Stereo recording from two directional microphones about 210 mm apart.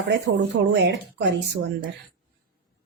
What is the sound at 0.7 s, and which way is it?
Speech, 55° right (ahead or behind).